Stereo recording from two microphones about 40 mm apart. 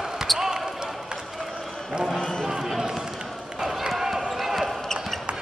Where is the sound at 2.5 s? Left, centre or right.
Centre.